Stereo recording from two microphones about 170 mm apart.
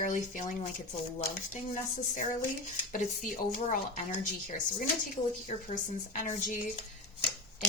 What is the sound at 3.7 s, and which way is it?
Speech, 55° left (ahead or behind).